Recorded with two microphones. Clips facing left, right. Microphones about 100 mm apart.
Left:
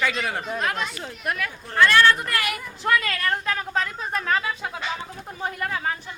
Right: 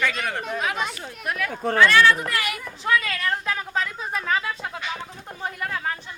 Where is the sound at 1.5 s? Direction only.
65° right (ahead or behind).